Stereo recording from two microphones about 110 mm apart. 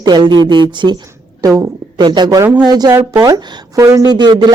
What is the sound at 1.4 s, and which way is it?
Speech, 30° right (ahead or behind).